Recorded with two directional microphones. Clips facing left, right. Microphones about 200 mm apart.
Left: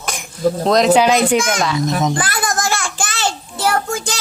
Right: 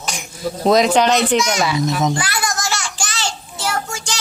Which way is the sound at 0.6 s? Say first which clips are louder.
Right 2 dB; 5° right (ahead or behind).